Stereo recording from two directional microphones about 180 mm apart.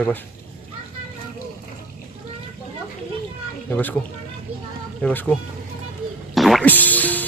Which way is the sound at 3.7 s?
10° left (ahead or behind).